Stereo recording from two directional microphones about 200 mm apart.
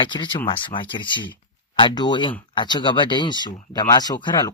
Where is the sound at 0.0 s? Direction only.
20° left (ahead or behind).